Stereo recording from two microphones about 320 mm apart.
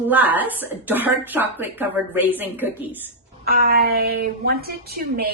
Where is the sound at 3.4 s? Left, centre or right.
Right.